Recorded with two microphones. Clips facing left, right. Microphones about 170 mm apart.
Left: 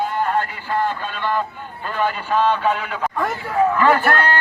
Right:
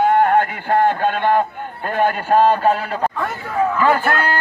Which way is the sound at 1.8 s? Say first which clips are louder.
Right 4 dB; 50° right (ahead or behind).